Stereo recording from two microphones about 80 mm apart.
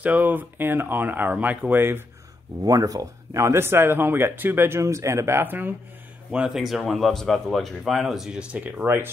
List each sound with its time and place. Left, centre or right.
0.0 s speech: right
2.6 s speech: right
6.3 s speech: centre
6.6 s speech: centre; by 8.9 s right